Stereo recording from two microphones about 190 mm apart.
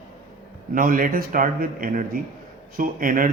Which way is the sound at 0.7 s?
45° right (ahead or behind).